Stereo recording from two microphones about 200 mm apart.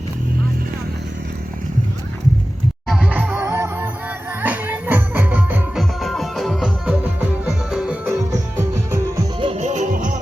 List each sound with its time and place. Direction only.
2.9 s music: 5° right (ahead or behind)
9.5 s music: 35° right (ahead or behind)